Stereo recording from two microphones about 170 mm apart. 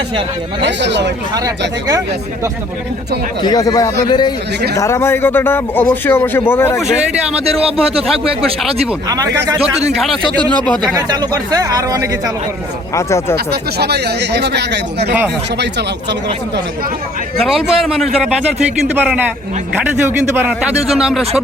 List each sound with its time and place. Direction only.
0.6 s speech: 90° right
3.4 s a man's voice: 25° left (ahead or behind)
9.0 s speech: 20° right (ahead or behind)
10.9 s speech: 25° right (ahead or behind)
13.0 s speech: 15° left (ahead or behind)
13.3 s speech: 70° right (ahead or behind)
17.3 s a man's voice: centre (ahead or behind)